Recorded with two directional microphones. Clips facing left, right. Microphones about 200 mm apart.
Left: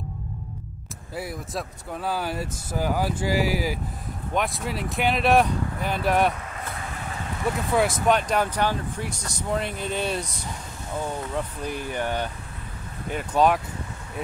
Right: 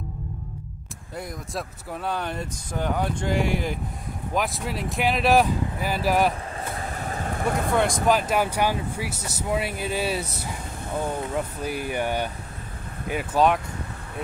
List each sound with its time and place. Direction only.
1.1 s speech: 5° left (ahead or behind)
6.5 s vehicle: 35° right (ahead or behind)
7.7 s speech: centre (ahead or behind)
11.6 s speech: 10° right (ahead or behind)